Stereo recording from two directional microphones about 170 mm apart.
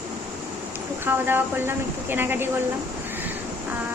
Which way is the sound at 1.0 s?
10° right (ahead or behind).